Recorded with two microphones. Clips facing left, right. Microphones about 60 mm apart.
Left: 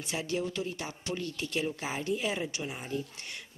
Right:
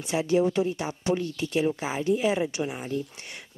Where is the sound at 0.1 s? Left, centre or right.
Right.